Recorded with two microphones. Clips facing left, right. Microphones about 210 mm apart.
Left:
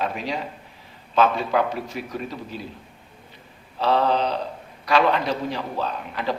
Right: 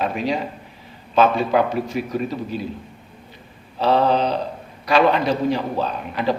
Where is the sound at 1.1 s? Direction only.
20° right (ahead or behind).